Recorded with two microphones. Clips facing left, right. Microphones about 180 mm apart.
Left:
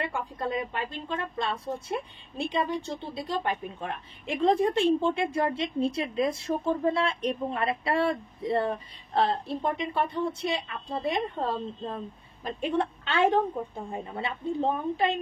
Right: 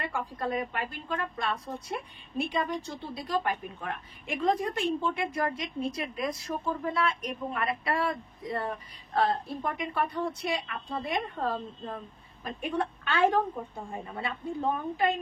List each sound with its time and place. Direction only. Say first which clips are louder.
0.0 s a woman's voice: left 1 dB; 25° left (ahead or behind)